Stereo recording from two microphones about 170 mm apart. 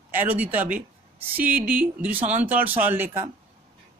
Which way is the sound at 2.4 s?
10° right (ahead or behind).